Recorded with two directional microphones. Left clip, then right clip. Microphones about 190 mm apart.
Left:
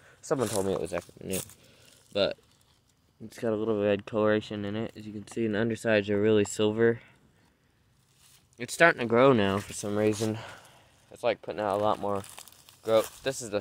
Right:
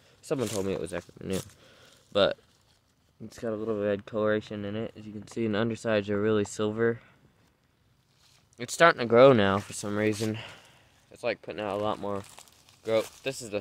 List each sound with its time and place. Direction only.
0.6 s speech: 15° right (ahead or behind)
1.7 s a sound: 25° right (ahead or behind)
3.3 s speech: 10° left (ahead or behind)
5.3 s speech: 15° right (ahead or behind); by 7.2 s centre (ahead or behind)
8.5 s speech: 15° right (ahead or behind)
12.2 s a sound: 40° left (ahead or behind)
13.2 s speech: centre (ahead or behind)